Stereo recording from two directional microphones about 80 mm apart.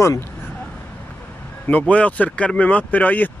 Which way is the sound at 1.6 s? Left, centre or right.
Centre.